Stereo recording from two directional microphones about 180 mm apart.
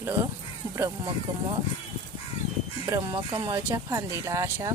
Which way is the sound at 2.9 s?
25° right (ahead or behind).